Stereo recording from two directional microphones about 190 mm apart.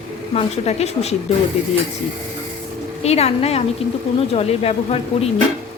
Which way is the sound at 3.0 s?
35° left (ahead or behind).